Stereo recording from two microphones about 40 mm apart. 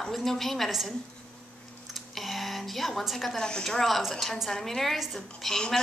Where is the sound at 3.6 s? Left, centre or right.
Centre.